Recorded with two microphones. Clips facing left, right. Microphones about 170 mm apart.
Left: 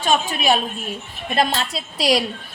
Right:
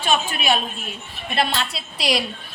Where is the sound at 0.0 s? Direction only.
40° left (ahead or behind).